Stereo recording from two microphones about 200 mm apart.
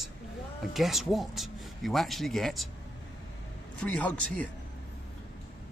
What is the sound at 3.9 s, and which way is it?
Speech, 5° left (ahead or behind).